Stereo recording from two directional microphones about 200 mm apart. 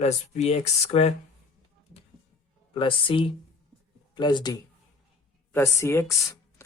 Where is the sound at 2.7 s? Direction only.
25° left (ahead or behind).